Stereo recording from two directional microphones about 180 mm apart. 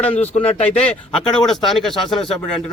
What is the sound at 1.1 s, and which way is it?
Speech, centre (ahead or behind).